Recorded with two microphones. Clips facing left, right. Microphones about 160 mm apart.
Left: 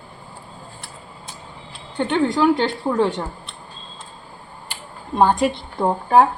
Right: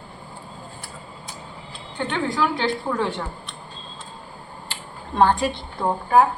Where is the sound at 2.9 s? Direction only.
15° left (ahead or behind).